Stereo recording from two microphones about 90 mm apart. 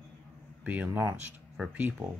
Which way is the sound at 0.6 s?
15° right (ahead or behind).